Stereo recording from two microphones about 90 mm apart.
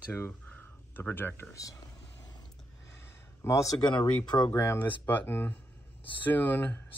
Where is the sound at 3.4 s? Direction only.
35° left (ahead or behind).